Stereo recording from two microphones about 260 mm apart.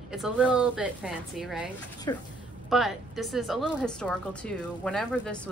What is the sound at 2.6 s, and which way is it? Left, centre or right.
A woman's voice, centre.